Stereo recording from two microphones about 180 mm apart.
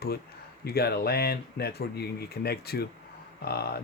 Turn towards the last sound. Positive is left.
turn(degrees=60)  # may be behind; listen again after turning